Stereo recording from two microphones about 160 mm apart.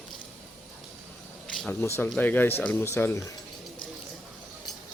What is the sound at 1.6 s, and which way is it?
Speech, 10° left (ahead or behind).